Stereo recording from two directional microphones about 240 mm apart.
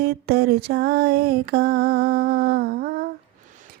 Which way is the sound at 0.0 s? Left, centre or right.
Right.